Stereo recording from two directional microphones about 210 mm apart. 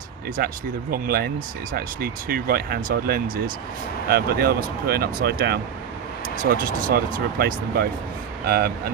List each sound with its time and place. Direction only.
0.4 s speech: 45° right (ahead or behind)